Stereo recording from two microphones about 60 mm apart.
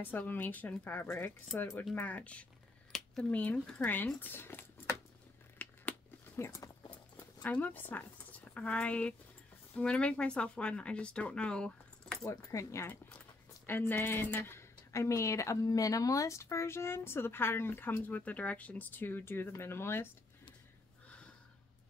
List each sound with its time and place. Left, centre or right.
0.0 s speech: left
2.0 s speech: left
2.9 s a sound: centre
3.3 s speech: left
5.6 s a sound: left
9.8 s speech: centre
12.3 s speech: left
13.7 s speech: left
14.9 s speech: left